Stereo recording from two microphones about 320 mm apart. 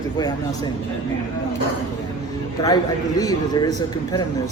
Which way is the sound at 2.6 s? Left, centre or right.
Centre.